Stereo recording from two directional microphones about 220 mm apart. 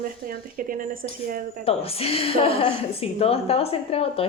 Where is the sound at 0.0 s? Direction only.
40° right (ahead or behind).